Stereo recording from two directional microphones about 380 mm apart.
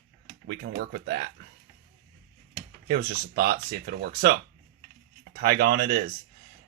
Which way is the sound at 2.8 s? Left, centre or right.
Right.